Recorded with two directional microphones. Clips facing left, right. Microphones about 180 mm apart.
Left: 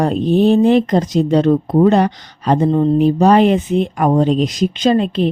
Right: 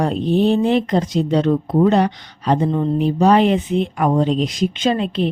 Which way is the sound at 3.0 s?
45° left (ahead or behind).